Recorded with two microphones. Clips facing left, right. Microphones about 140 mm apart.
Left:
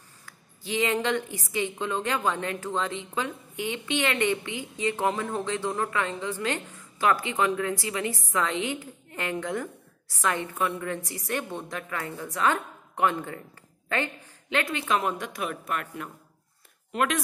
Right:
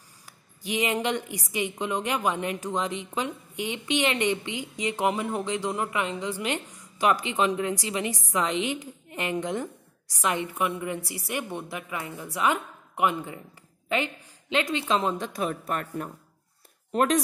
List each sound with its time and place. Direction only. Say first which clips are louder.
0.2 s a woman's voice: right 3 dB; 15° right (ahead or behind); by 15.9 s 35° right (ahead or behind)
16.9 s speech: right 4 dB; 35° right (ahead or behind)